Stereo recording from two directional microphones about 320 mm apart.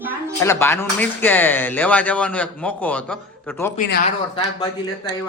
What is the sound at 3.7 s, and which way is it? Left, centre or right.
Speech, left.